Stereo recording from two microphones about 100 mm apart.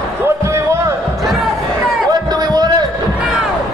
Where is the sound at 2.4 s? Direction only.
40° right (ahead or behind).